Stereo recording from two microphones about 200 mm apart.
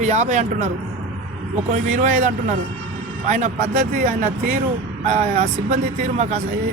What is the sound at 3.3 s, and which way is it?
Speech, 35° right (ahead or behind).